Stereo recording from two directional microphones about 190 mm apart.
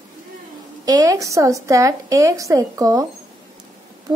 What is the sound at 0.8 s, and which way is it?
A woman's voice, 20° right (ahead or behind).